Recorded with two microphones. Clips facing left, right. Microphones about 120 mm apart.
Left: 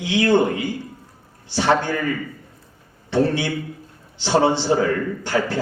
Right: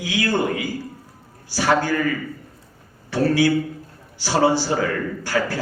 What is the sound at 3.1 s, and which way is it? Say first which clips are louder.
A man's voice: right 2 dB; 20° left (ahead or behind).